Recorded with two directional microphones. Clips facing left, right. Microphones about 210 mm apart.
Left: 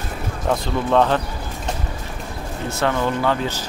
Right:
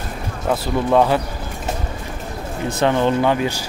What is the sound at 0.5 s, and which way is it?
Speech, 10° right (ahead or behind).